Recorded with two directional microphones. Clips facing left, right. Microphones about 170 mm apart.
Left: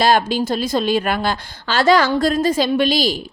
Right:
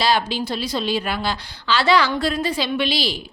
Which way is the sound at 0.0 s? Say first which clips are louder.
Left 5 dB; 50° left (ahead or behind).